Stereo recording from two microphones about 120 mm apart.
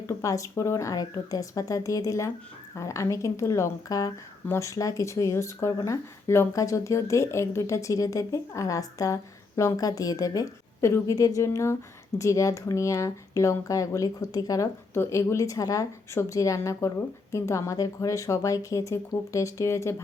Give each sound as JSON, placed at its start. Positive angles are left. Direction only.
{"t": 0.1, "sound": "speech", "side_deg": 25}